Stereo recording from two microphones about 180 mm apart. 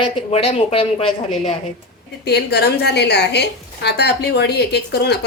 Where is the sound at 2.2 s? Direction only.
65° left (ahead or behind).